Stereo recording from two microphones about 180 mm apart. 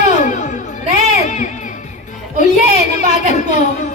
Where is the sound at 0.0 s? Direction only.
40° left (ahead or behind).